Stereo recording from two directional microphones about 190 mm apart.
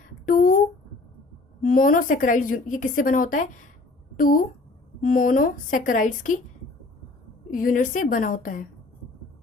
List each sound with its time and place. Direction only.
0.3 s a woman's voice: 45° left (ahead or behind)
1.6 s a woman's voice: 45° left (ahead or behind)
7.5 s a woman's voice: 45° left (ahead or behind)